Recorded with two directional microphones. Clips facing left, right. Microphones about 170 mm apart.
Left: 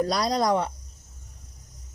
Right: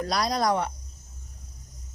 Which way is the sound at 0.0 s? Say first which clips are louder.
Left 2 dB; 35° left (ahead or behind).